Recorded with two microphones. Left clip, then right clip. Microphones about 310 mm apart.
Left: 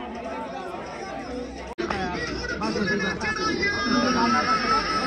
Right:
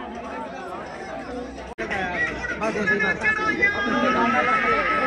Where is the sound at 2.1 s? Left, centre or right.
Right.